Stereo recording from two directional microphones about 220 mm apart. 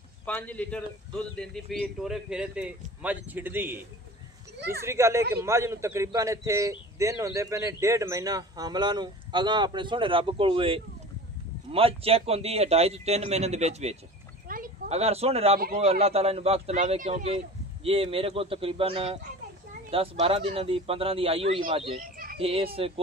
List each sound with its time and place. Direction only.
0.2 s speech: 5° left (ahead or behind); by 3.8 s 10° right (ahead or behind)
4.6 s speech: 45° right (ahead or behind)
4.8 s a man's voice: 10° right (ahead or behind)
22.1 s a sound: 40° right (ahead or behind)
22.4 s a man's voice: 25° right (ahead or behind)